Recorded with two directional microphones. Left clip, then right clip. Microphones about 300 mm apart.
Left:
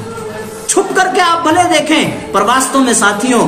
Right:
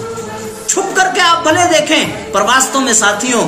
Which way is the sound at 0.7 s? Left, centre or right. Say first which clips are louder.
Left 1 dB; centre.